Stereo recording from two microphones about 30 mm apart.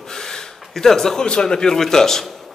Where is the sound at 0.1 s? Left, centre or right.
Centre.